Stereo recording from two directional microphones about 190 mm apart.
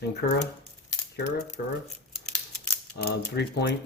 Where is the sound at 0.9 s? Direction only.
65° left (ahead or behind).